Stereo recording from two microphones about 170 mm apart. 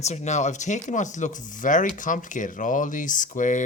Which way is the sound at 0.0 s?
40° left (ahead or behind).